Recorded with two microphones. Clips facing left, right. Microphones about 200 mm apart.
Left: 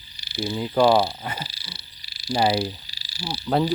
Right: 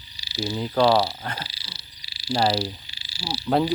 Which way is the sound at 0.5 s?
5° left (ahead or behind).